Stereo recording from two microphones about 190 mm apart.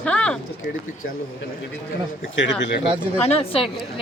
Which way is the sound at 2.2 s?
80° left.